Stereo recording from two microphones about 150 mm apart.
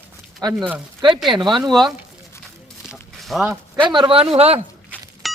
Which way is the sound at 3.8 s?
30° right (ahead or behind).